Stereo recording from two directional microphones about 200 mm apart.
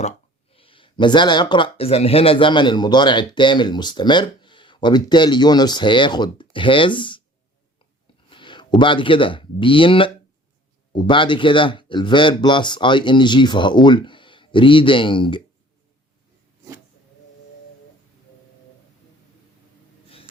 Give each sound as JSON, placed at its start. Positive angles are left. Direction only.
{"t": 0.5, "sound": "speech", "side_deg": 25}
{"t": 8.3, "sound": "speech", "side_deg": 25}